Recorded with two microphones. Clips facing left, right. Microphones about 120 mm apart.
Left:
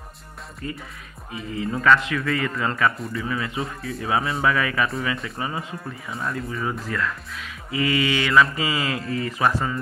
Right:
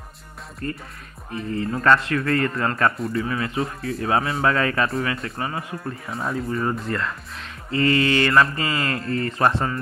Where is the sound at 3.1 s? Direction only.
30° right (ahead or behind).